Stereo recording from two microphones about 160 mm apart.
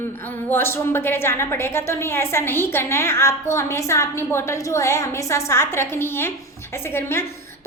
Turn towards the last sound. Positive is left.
turn(degrees=15)  # may be behind; listen again after turning